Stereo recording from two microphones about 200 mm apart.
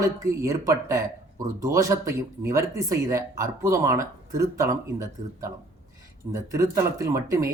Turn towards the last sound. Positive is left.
turn(degrees=-15)  # may be behind; listen again after turning